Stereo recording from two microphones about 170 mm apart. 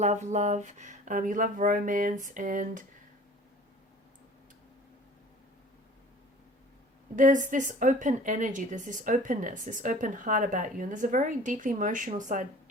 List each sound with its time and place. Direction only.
0.0 s speech: 45° right (ahead or behind)
7.2 s speech: 50° right (ahead or behind)